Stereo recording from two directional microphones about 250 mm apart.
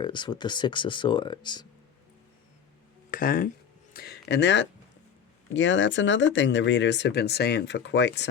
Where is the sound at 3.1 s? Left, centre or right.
Left.